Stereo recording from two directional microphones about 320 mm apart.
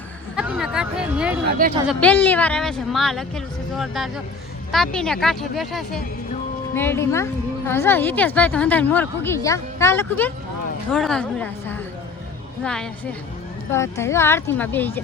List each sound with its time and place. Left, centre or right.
0.3 s speech: centre
1.5 s speech: right
1.9 s a woman's voice: centre